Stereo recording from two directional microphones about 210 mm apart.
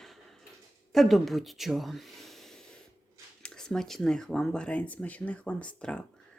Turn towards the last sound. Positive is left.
turn(degrees=5)  # may be behind; listen again after turning